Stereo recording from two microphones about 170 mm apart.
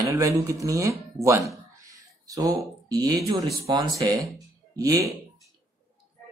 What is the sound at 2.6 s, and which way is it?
Speech, 20° right (ahead or behind).